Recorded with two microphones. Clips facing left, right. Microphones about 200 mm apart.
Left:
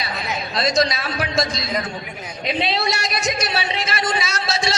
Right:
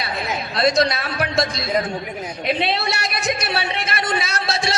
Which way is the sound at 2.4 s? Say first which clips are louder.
Even; 60° right (ahead or behind).